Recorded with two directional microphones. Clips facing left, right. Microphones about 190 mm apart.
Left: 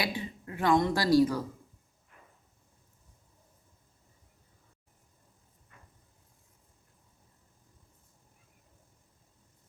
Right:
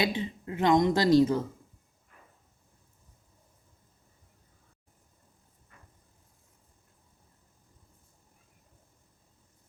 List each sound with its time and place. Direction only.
0.0 s speech: 20° right (ahead or behind)